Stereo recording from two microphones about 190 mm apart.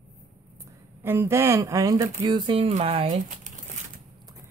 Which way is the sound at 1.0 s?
15° right (ahead or behind).